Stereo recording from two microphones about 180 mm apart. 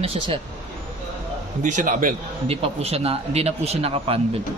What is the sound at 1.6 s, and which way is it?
Speech, 45° right (ahead or behind).